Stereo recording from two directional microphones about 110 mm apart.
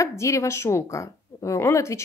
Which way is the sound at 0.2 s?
30° left (ahead or behind).